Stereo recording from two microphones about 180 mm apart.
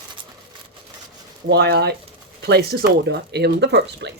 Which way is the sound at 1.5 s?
65° right (ahead or behind).